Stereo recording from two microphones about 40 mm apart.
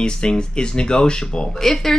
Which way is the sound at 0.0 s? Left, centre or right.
Left.